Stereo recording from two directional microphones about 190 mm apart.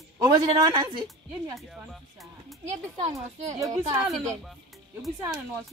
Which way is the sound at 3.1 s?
15° right (ahead or behind).